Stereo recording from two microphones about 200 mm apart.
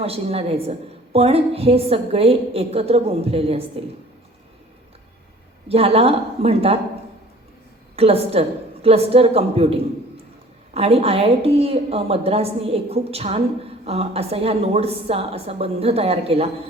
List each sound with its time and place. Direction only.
0.0 s a woman's voice: 30° right (ahead or behind)
5.6 s a woman's voice: 30° right (ahead or behind)
7.9 s a woman's voice: 30° right (ahead or behind)
10.8 s a woman's voice: 30° right (ahead or behind)